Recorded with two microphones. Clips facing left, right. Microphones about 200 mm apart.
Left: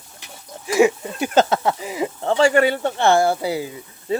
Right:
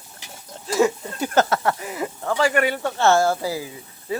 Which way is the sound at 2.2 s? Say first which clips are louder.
Left 5 dB; 30° left (ahead or behind).